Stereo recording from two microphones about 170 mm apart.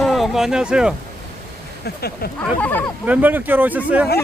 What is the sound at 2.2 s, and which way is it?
Speech, 65° left (ahead or behind).